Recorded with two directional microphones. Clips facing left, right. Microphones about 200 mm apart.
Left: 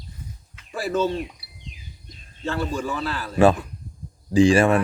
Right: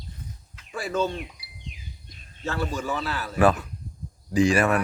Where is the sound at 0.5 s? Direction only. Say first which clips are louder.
Left 3 dB; 5° left (ahead or behind).